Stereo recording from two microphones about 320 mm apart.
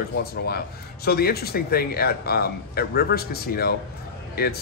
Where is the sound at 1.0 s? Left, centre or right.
Left.